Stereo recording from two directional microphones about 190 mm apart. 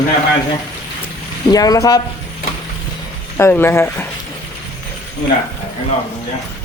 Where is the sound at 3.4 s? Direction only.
10° left (ahead or behind).